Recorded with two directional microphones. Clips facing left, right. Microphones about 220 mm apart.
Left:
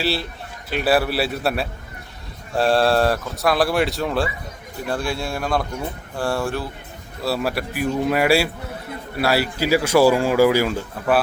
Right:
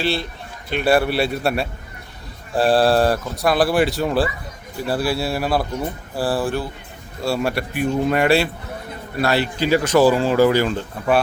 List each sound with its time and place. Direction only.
0.0 s speech: 5° left (ahead or behind)